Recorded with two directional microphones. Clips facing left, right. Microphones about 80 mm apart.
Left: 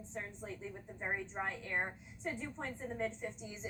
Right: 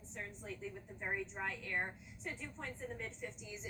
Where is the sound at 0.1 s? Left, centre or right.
Left.